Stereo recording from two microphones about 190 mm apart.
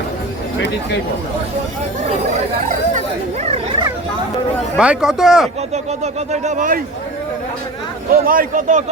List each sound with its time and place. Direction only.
3.4 s bow-wow: 30° right (ahead or behind)
4.8 s speech: 5° right (ahead or behind)
5.7 s speech: 35° right (ahead or behind)
8.1 s speech: 50° right (ahead or behind)